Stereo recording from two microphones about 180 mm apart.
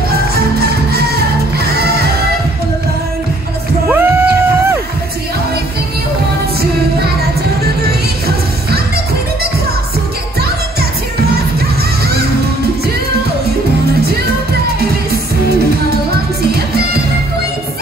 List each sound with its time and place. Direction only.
0.1 s music: 60° right (ahead or behind)
3.9 s a sound: 10° right (ahead or behind)
8.7 s music: 60° right (ahead or behind)